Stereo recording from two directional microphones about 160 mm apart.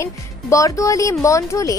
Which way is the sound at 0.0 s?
20° left (ahead or behind).